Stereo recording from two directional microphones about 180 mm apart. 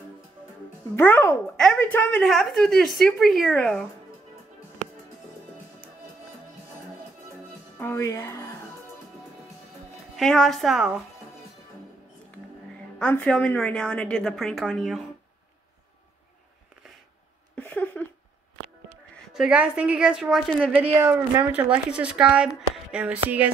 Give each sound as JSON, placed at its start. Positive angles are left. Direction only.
{"t": 0.9, "sound": "a woman's voice", "side_deg": 10}
{"t": 7.8, "sound": "speech", "side_deg": 15}
{"t": 10.1, "sound": "a woman's voice", "side_deg": 0}
{"t": 13.0, "sound": "a woman's voice", "side_deg": 10}
{"t": 17.6, "sound": "a sound", "side_deg": 10}
{"t": 19.3, "sound": "a woman's voice", "side_deg": -5}
{"t": 21.0, "sound": "speech", "side_deg": -10}